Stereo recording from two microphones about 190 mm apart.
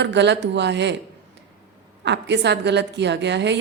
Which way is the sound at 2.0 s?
65° right (ahead or behind).